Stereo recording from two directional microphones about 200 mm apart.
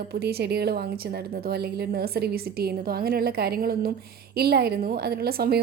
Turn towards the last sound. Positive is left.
turn(degrees=-50)  # may be behind; listen again after turning